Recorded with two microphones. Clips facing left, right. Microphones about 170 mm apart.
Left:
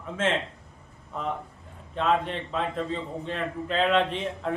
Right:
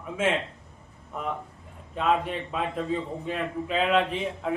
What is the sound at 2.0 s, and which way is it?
A man's voice, 5° right (ahead or behind).